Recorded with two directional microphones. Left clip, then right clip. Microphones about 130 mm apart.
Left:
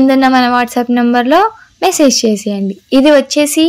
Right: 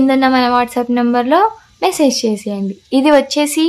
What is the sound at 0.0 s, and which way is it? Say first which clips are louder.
A woman's voice: left 3 dB; 25° left (ahead or behind).